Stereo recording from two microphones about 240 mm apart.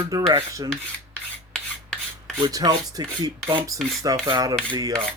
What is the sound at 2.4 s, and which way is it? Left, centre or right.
Speech, centre.